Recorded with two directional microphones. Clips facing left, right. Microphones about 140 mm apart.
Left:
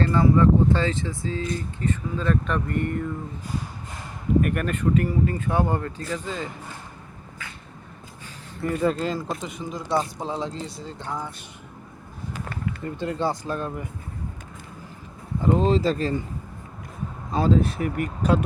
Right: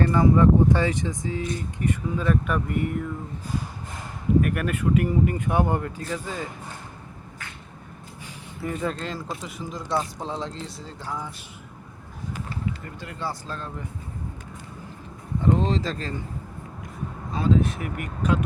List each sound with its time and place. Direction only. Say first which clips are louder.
0.0 s speech: even; 15° right (ahead or behind)
4.4 s speech: left 1 dB; centre (ahead or behind)
8.6 s speech: left 5 dB; centre (ahead or behind)
13.0 s speech: left 11 dB; 25° left (ahead or behind)
13.4 s speech: left 6 dB; 15° left (ahead or behind)
15.7 s speech: left 6 dB; 10° left (ahead or behind)
17.3 s speech: left 2 dB; 35° left (ahead or behind)